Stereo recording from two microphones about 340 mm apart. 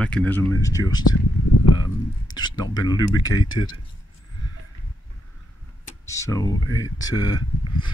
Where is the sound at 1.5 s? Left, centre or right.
Left.